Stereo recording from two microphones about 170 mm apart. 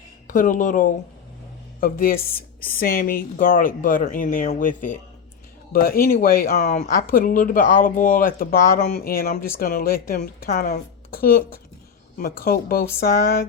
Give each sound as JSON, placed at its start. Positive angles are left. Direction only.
{"t": 0.3, "sound": "speech", "side_deg": 55}
{"t": 5.7, "sound": "speech", "side_deg": 60}
{"t": 6.7, "sound": "speech", "side_deg": 40}
{"t": 6.9, "sound": "speech", "side_deg": 55}